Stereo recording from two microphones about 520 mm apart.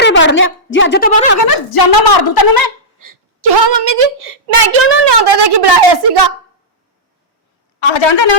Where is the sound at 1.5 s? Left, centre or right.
Left.